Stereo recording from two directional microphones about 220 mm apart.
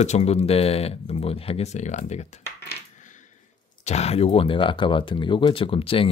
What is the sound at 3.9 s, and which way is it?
Speech, 30° left (ahead or behind).